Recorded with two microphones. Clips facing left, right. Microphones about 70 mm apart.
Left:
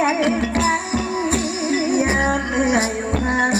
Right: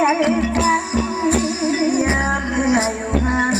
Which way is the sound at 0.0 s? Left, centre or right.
Centre.